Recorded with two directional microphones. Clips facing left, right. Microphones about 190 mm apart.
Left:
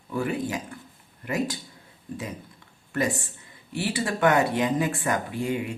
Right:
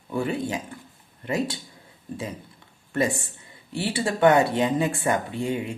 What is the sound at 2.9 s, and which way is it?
Speech, 25° right (ahead or behind).